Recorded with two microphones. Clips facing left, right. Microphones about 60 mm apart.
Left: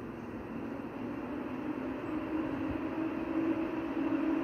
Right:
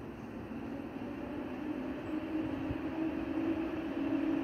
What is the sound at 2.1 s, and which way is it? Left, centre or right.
Vehicle, left.